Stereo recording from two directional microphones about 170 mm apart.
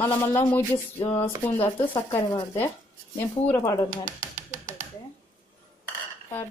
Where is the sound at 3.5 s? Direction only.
20° left (ahead or behind).